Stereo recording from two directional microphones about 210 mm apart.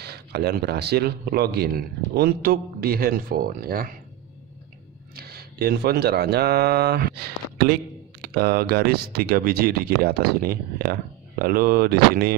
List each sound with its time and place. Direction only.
0.0 s speech: 50° right (ahead or behind)
5.1 s speech: 50° right (ahead or behind)